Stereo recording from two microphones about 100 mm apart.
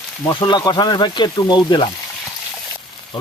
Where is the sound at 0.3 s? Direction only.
50° left (ahead or behind).